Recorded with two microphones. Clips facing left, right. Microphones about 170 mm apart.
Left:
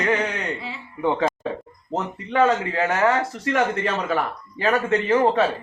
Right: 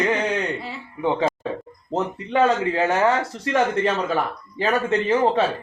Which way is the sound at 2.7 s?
25° right (ahead or behind).